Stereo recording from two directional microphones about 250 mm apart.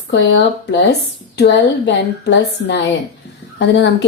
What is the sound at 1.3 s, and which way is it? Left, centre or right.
A woman's voice, left.